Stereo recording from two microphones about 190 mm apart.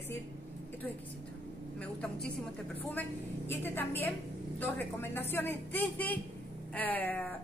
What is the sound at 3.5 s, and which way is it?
A woman's voice, 10° left (ahead or behind).